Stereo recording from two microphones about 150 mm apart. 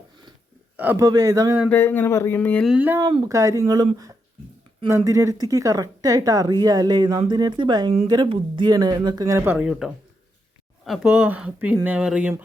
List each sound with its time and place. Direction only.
0.8 s speech: 15° right (ahead or behind)
1.7 s speech: 10° left (ahead or behind)
2.6 s speech: 10° right (ahead or behind)
3.0 s speech: 35° right (ahead or behind)
3.2 s speech: 20° right (ahead or behind)
4.9 s speech: 20° right (ahead or behind)